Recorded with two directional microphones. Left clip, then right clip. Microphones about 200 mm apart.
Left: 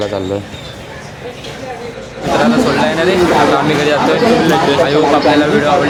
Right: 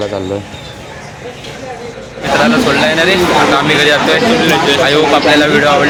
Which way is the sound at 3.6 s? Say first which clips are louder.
Right 3 dB; centre (ahead or behind).